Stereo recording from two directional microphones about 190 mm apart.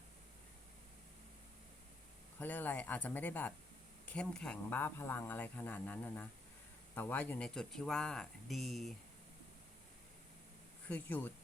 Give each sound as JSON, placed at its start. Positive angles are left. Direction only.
{"t": 2.4, "sound": "speech", "side_deg": 10}
{"t": 10.8, "sound": "speech", "side_deg": 10}